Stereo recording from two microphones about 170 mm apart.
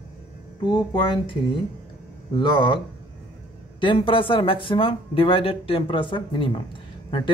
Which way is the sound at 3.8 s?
30° left (ahead or behind).